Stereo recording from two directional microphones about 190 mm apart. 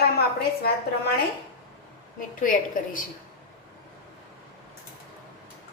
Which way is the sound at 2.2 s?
45° left (ahead or behind).